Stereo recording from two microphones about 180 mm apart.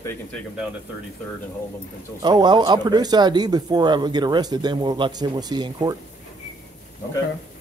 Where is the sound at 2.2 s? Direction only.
25° right (ahead or behind).